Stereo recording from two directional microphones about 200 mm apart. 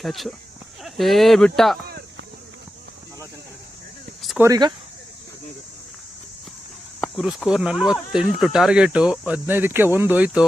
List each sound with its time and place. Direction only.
0.0 s speech: centre (ahead or behind)
4.2 s cricket: centre (ahead or behind)
4.4 s speech: 20° right (ahead or behind)
7.0 s speech: 5° right (ahead or behind)